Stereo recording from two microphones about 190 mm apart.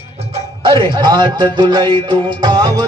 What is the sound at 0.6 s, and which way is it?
Music, 25° right (ahead or behind).